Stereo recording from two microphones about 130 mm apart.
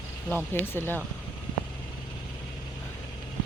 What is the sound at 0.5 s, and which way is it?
Speech, 15° left (ahead or behind).